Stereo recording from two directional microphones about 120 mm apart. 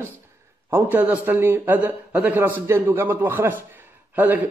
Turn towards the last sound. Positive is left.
turn(degrees=-15)  # may be behind; listen again after turning